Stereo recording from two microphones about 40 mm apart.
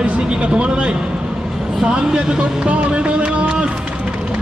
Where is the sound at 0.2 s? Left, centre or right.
Right.